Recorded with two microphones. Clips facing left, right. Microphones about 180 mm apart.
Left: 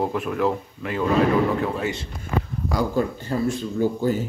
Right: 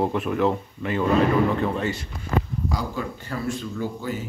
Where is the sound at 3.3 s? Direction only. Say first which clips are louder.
Left 4 dB; 30° left (ahead or behind).